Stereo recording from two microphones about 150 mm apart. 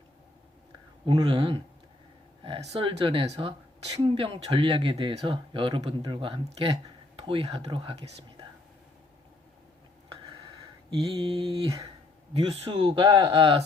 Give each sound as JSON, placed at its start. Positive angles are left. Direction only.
{"t": 1.0, "sound": "speech", "side_deg": -35}
{"t": 10.9, "sound": "speech", "side_deg": -35}